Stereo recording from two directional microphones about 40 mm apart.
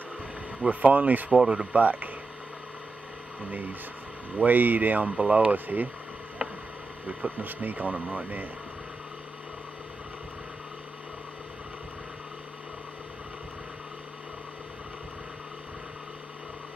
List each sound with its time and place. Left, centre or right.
0.6 s speech: right
1.4 s speech: right
1.8 s speech: right
3.4 s speech: right
7.1 s speech: right